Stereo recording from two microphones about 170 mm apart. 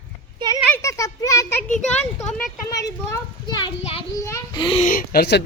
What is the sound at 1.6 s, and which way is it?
Speech, 45° left (ahead or behind).